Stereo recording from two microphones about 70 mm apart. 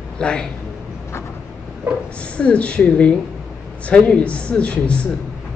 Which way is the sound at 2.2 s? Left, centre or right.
Centre.